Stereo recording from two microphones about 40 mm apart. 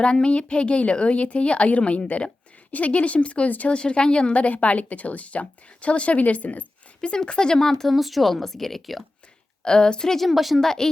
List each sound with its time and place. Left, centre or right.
0.0 s a woman's voice: left
7.0 s a woman's voice: left
7.7 s speech: centre
9.6 s a woman's voice: left
10.2 s speech: centre
10.6 s a woman's voice: centre